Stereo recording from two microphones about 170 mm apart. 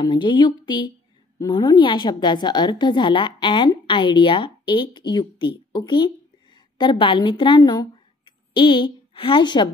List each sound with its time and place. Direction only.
0.0 s a woman's voice: 25° left (ahead or behind)